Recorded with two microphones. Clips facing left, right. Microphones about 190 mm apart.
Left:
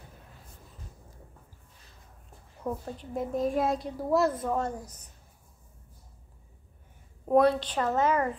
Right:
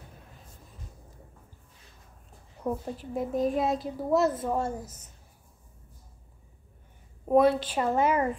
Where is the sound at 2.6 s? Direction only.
5° right (ahead or behind).